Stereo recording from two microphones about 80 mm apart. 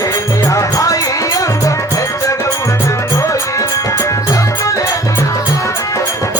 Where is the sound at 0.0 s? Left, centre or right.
Left.